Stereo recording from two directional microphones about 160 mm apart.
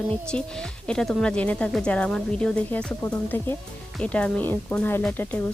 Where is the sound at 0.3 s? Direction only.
5° left (ahead or behind).